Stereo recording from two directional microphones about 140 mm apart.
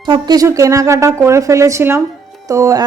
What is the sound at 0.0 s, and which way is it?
A woman's voice, 30° right (ahead or behind).